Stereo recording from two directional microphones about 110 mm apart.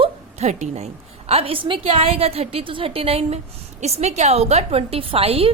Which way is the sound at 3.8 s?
85° right.